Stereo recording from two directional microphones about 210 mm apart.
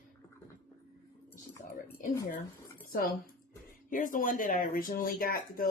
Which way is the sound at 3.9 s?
40° left (ahead or behind).